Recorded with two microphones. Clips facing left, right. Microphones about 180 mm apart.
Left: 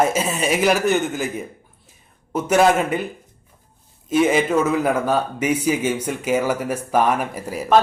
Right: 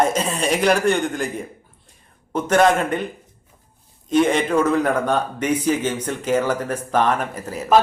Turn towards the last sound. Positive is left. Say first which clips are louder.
# left 1 dB
turn(degrees=10)  # may be behind; listen again after turning